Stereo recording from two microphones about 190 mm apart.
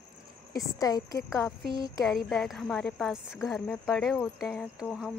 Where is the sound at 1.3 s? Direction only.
Centre (ahead or behind).